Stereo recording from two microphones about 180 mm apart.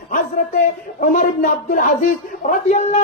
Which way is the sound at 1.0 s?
45° left (ahead or behind).